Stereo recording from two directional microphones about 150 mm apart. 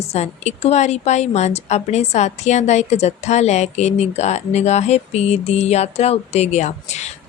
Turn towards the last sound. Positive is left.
turn(degrees=50)  # may be behind; listen again after turning